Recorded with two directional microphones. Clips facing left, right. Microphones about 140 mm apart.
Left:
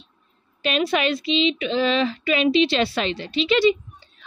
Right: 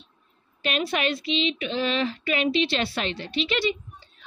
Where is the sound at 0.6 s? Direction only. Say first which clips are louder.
Left 5 dB; 90° left.